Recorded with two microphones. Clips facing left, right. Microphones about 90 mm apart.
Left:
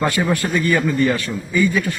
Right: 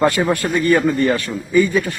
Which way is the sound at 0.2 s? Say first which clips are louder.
Right 2 dB; 15° right (ahead or behind).